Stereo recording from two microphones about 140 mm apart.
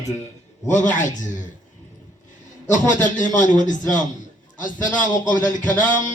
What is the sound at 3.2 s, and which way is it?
A man's voice, 65° left (ahead or behind).